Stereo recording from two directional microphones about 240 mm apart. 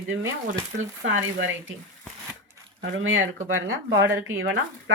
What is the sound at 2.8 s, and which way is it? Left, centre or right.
Speech, right.